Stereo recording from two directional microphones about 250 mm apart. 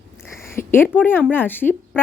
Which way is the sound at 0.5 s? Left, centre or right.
Centre.